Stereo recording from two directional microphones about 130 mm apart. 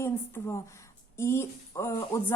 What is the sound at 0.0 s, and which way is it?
Speech, 20° left (ahead or behind).